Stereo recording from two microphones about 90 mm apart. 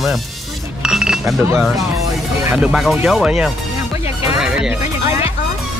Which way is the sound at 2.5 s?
Centre (ahead or behind).